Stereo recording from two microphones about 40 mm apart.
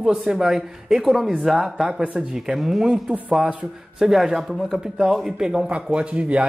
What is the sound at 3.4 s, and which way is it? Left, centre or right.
Speech, right.